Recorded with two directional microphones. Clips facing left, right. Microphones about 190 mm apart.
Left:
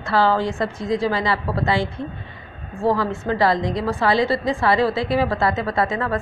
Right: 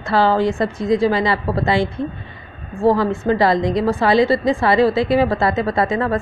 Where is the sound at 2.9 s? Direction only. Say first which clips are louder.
Right 5 dB; 20° right (ahead or behind).